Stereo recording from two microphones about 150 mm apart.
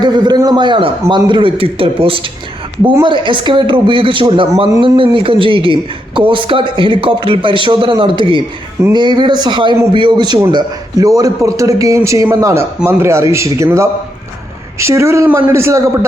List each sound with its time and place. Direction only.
0.0 s a man's voice: 30° right (ahead or behind)